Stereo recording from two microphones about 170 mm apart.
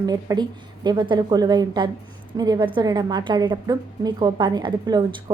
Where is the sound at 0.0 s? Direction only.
25° right (ahead or behind).